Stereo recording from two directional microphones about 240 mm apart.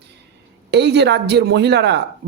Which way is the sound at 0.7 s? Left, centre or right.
Right.